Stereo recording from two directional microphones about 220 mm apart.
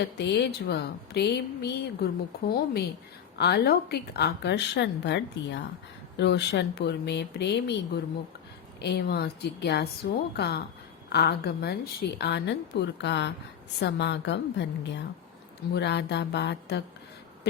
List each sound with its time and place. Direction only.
0.0 s a woman's voice: 50° left (ahead or behind)
3.3 s a woman's voice: 50° left (ahead or behind)
17.5 s a sound: 45° left (ahead or behind)